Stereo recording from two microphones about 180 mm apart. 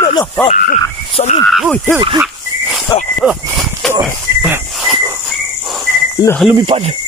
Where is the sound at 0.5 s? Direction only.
40° left (ahead or behind).